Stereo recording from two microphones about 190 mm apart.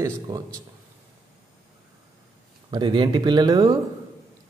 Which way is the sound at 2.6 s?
25° right (ahead or behind).